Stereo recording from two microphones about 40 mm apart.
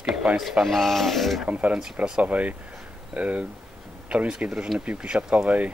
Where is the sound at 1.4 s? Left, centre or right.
Right.